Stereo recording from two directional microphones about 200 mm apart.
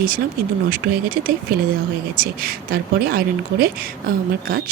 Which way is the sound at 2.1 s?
45° right (ahead or behind).